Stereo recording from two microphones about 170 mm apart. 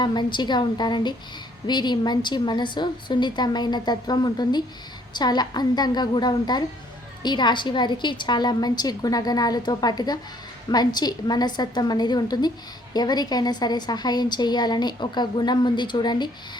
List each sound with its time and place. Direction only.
0.0 s a woman's voice: 25° left (ahead or behind)